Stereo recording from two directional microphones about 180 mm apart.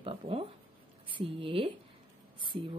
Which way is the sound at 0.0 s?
30° right (ahead or behind).